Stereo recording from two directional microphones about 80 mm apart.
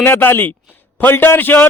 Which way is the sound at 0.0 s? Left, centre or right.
Left.